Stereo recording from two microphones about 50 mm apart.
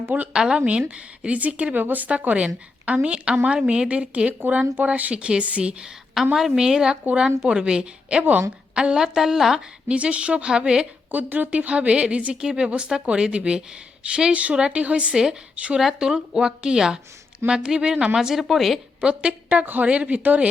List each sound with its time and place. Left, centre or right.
0.3 s a woman's voice: centre
6.3 s a woman's voice: centre
8.2 s a woman's voice: right
8.7 s speech: centre
9.1 s a woman's voice: centre
9.9 s a woman's voice: right
11.1 s a woman's voice: right
15.8 s a woman's voice: centre
19.0 s a woman's voice: right
19.6 s a woman's voice: right